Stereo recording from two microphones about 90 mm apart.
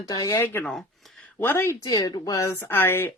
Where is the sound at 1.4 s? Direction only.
25° left (ahead or behind).